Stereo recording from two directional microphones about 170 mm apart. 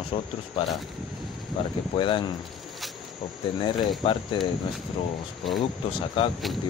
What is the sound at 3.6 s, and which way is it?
Speech, 30° left (ahead or behind).